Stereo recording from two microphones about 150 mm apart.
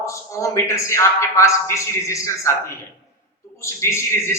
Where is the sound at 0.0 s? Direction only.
20° left (ahead or behind).